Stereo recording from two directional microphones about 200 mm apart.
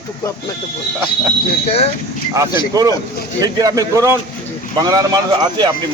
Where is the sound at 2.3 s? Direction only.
15° right (ahead or behind).